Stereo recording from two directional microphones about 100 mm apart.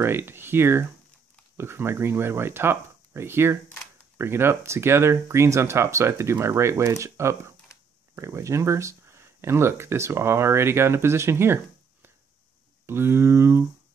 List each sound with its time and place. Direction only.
0.0 s speech: 25° right (ahead or behind)